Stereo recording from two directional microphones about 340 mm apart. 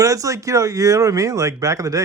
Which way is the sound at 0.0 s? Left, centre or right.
Centre.